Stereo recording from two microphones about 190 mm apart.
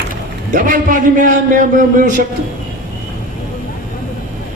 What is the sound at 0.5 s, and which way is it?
Speech, 45° right (ahead or behind).